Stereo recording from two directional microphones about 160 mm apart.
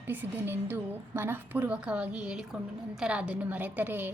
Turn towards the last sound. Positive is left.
turn(degrees=-10)  # may be behind; listen again after turning